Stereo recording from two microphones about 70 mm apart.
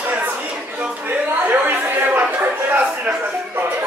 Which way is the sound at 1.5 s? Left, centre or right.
Right.